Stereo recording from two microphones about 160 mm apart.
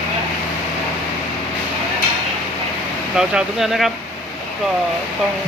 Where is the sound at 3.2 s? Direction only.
Centre (ahead or behind).